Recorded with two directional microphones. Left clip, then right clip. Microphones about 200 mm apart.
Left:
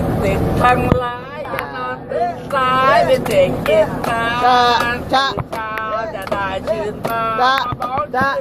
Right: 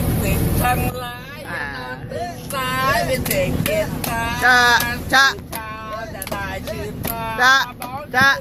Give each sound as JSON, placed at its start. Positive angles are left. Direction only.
{"t": 0.6, "sound": "speech", "side_deg": -20}
{"t": 2.6, "sound": "speech", "side_deg": -20}
{"t": 7.3, "sound": "speech", "side_deg": -20}